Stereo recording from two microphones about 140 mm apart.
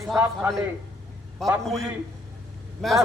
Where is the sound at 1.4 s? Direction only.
Centre (ahead or behind).